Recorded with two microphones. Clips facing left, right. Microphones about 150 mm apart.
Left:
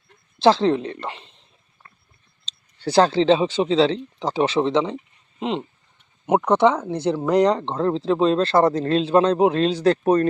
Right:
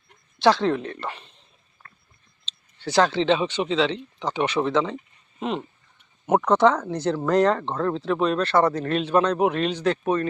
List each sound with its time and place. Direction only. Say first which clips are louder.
0.3 s speech: left 3 dB; 25° left (ahead or behind)
2.5 s speech: left 5 dB; 35° left (ahead or behind)